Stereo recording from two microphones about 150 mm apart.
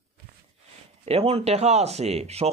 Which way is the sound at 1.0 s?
40° right (ahead or behind).